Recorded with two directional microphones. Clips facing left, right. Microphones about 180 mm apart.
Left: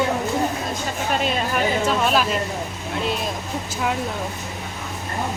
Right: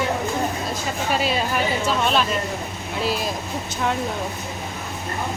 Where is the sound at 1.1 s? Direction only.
5° right (ahead or behind).